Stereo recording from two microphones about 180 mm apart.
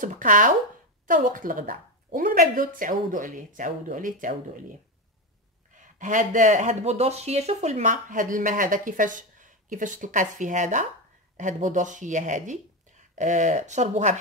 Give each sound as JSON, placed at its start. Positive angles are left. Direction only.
{"t": 0.0, "sound": "speech", "side_deg": -45}
{"t": 5.8, "sound": "speech", "side_deg": -45}